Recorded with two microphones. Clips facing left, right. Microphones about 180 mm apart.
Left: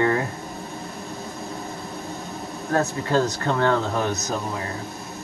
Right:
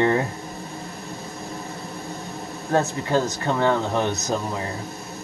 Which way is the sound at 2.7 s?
25° right (ahead or behind).